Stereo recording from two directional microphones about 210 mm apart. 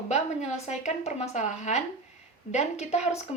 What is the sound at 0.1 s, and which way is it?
A woman's voice, 35° left (ahead or behind).